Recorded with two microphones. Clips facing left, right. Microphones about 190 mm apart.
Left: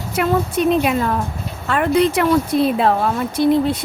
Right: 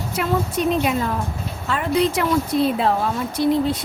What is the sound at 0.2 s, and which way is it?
Speech, 60° left (ahead or behind).